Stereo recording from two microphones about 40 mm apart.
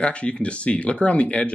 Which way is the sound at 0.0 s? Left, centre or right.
Left.